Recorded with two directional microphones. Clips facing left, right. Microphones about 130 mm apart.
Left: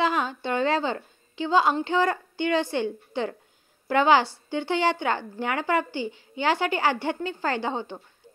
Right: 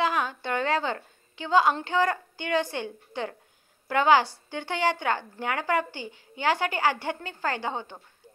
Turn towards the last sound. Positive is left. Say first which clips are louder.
# left 3 dB
turn(degrees=25)  # may be behind; listen again after turning